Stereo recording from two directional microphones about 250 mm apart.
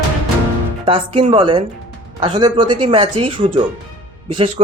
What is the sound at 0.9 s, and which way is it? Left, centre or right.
Speech, right.